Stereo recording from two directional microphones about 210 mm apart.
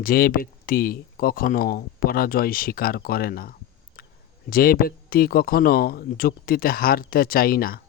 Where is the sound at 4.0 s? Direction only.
45° left (ahead or behind).